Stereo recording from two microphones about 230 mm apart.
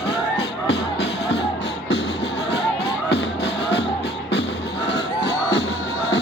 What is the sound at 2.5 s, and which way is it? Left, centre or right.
Music, left.